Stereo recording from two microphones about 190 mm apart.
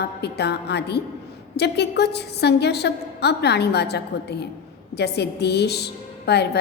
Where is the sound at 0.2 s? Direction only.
60° left (ahead or behind).